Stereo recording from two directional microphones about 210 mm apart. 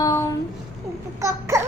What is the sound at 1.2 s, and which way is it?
Speech, 15° right (ahead or behind).